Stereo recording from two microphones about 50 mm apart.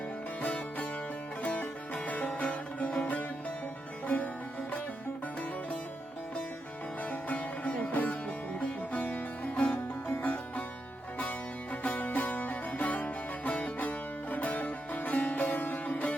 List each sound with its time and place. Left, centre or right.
0.4 s music: left
7.0 s music: left